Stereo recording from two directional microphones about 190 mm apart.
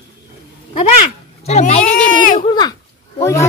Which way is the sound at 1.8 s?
50° left (ahead or behind).